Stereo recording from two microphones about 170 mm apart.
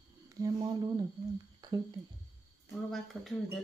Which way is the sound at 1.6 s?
25° right (ahead or behind).